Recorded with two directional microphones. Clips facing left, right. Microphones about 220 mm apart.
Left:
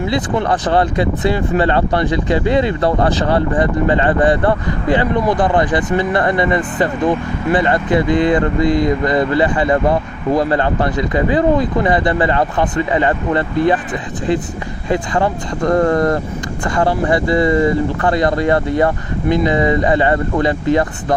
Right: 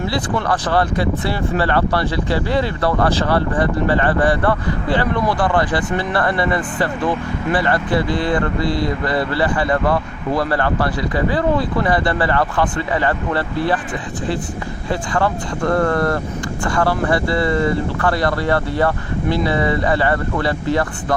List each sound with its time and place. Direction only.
0.1 s speech: 20° left (ahead or behind)
14.8 s speech: 20° left (ahead or behind)